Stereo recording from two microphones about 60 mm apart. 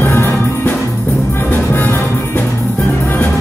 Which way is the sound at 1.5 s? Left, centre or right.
Left.